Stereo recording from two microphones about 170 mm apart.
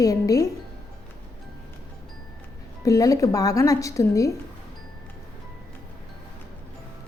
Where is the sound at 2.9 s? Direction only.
20° left (ahead or behind).